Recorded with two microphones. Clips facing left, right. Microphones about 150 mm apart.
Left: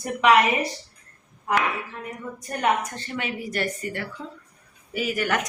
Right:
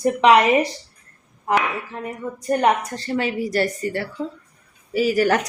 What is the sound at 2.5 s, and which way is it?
Speech, 30° right (ahead or behind).